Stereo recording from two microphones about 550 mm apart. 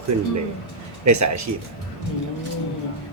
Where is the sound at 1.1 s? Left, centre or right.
Right.